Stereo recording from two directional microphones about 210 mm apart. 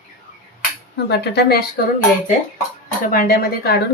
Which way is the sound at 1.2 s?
50° left (ahead or behind).